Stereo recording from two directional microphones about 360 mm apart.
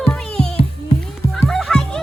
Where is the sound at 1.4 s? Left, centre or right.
Centre.